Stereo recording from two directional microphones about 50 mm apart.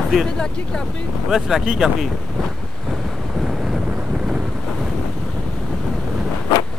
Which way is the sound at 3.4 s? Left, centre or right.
Centre.